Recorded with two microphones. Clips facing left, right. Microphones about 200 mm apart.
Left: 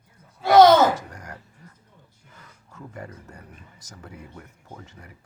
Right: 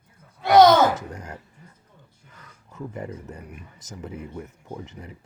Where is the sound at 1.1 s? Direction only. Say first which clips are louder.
Right 4 dB; 25° right (ahead or behind).